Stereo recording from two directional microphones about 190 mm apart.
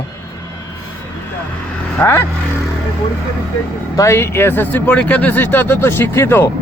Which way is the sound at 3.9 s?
15° left (ahead or behind).